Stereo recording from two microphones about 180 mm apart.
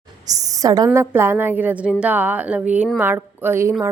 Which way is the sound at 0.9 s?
15° right (ahead or behind).